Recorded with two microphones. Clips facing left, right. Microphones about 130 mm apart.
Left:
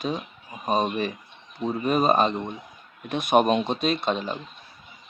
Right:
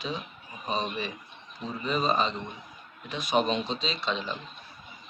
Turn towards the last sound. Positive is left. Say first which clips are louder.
# left 6 dB
turn(degrees=50)  # may be behind; listen again after turning